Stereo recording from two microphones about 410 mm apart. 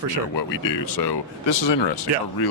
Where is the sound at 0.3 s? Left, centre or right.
Left.